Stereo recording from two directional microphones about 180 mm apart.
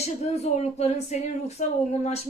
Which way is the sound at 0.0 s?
35° left (ahead or behind).